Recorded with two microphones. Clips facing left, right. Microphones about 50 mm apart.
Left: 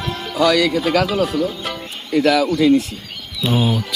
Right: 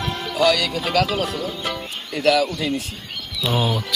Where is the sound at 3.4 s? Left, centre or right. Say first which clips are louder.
Left 3 dB; centre.